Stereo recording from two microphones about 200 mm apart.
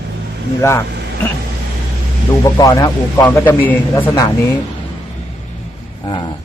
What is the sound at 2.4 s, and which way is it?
A man's voice, 15° left (ahead or behind).